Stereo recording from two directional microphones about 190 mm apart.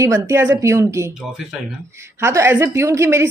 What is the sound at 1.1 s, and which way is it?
Speech, centre (ahead or behind).